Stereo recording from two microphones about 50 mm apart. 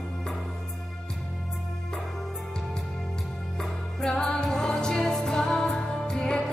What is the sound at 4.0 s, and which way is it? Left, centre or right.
Music, centre.